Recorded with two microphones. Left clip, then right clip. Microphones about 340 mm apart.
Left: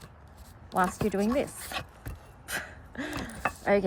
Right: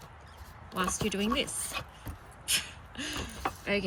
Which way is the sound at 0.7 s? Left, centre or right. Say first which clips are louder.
Left 5 dB; left.